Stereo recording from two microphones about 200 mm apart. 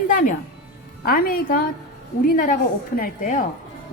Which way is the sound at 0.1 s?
40° left (ahead or behind).